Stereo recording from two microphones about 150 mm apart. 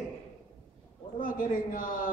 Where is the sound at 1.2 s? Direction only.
65° left (ahead or behind).